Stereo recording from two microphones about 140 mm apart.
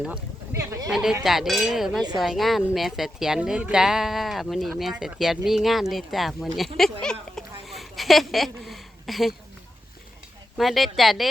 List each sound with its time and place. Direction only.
0.5 s speech: 20° right (ahead or behind)
0.9 s speech: 5° right (ahead or behind)
7.0 s a sound: 5° left (ahead or behind)
10.6 s speech: centre (ahead or behind)